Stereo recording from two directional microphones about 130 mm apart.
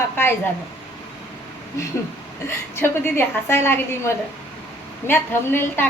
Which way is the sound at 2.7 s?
20° left (ahead or behind).